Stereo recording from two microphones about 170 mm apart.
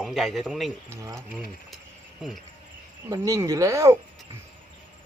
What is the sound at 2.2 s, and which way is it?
Speech, centre (ahead or behind).